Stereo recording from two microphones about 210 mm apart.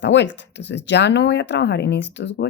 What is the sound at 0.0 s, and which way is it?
Speech, 55° left (ahead or behind).